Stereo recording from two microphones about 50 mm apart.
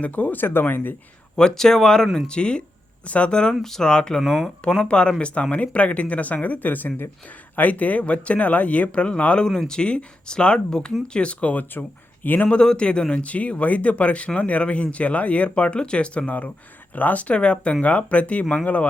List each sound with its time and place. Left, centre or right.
0.0 s speech: left
1.4 s speech: centre
3.5 s speech: centre
4.3 s speech: centre
4.6 s speech: centre
9.5 s speech: centre
11.5 s speech: left
12.5 s speech: centre